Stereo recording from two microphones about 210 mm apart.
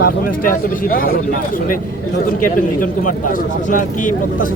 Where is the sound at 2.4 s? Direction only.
40° left (ahead or behind).